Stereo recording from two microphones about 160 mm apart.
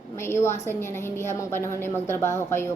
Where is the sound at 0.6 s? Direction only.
15° left (ahead or behind).